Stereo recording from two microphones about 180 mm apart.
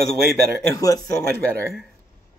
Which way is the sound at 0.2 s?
55° right (ahead or behind).